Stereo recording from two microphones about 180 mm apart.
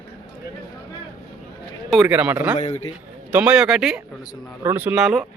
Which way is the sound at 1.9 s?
5° right (ahead or behind).